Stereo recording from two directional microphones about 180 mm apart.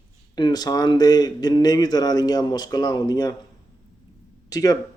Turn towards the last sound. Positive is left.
turn(degrees=20)  # may be behind; listen again after turning